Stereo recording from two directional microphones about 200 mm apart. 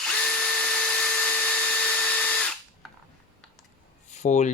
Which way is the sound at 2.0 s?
5° left (ahead or behind).